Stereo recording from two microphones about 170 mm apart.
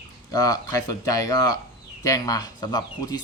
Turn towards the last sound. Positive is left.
turn(degrees=25)  # may be behind; listen again after turning